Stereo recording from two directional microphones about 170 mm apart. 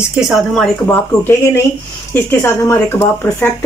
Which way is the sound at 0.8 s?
15° left (ahead or behind).